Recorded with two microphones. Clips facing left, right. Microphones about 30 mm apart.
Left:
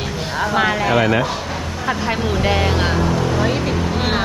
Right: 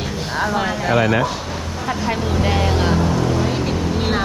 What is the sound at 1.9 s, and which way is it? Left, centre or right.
Speech, centre.